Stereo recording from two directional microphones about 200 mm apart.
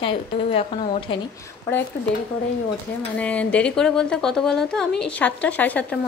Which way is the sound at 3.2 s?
5° left (ahead or behind).